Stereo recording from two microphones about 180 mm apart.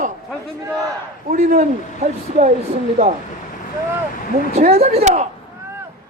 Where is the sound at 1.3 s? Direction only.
45° right (ahead or behind).